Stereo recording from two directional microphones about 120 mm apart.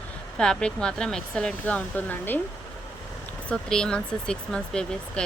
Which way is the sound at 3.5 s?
5° left (ahead or behind).